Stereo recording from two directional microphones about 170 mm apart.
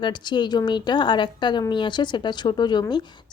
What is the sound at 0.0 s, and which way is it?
Speech, 25° left (ahead or behind).